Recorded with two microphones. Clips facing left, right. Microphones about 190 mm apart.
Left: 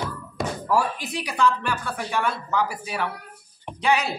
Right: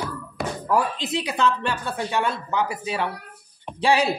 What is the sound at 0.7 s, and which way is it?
Speech, 20° right (ahead or behind).